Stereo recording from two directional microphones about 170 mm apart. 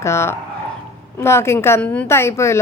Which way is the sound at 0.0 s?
15° left (ahead or behind).